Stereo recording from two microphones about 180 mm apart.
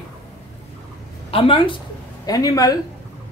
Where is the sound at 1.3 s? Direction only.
30° left (ahead or behind).